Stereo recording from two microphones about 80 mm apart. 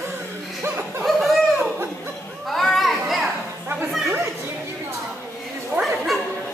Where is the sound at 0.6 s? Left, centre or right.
Right.